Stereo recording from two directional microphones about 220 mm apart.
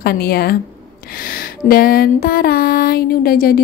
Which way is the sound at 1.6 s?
40° left (ahead or behind).